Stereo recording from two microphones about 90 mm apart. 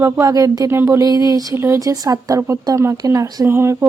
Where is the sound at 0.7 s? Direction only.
30° right (ahead or behind).